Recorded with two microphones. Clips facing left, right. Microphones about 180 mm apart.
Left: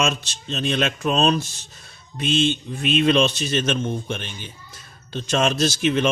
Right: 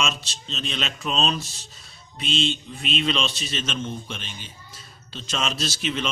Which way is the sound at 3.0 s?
50° left (ahead or behind).